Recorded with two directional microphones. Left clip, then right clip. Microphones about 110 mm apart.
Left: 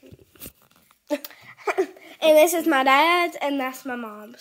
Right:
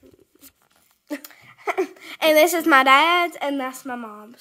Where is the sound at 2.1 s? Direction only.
40° right (ahead or behind).